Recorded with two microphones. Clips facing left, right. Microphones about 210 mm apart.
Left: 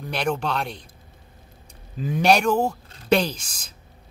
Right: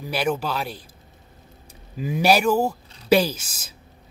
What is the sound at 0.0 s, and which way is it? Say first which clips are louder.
Speech: right 1 dB; 5° right (ahead or behind).